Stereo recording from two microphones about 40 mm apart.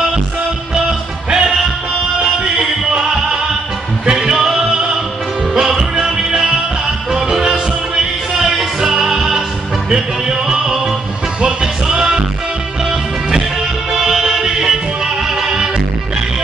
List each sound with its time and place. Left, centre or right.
0.7 s music: centre
2.9 s music: centre
13.9 s music: centre